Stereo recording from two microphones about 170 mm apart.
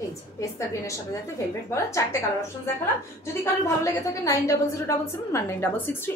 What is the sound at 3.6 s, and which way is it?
A woman's voice, 20° left (ahead or behind).